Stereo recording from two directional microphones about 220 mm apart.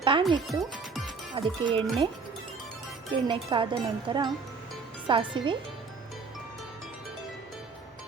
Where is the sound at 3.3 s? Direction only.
20° right (ahead or behind).